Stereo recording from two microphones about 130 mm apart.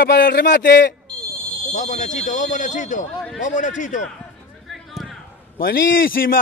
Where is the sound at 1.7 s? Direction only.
75° left (ahead or behind).